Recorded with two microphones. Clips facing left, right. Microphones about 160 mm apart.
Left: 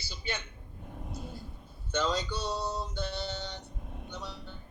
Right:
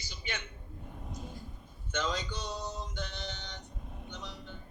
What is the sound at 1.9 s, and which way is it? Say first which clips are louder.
Speech: left 4 dB; 35° left (ahead or behind).